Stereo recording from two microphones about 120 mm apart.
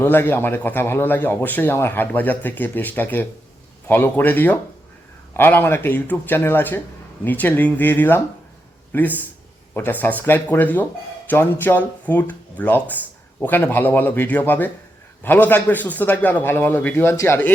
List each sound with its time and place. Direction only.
0.0 s a man's voice: 15° left (ahead or behind)